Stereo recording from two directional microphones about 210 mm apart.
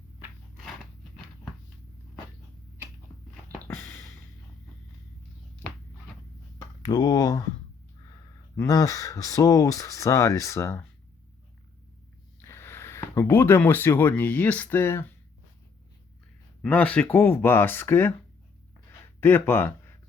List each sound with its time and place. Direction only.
3.7 s music: 10° left (ahead or behind)
6.8 s speech: 20° left (ahead or behind)
8.5 s speech: 15° left (ahead or behind)
12.4 s speech: 10° left (ahead or behind)
16.6 s speech: 5° left (ahead or behind)
19.2 s speech: 10° left (ahead or behind)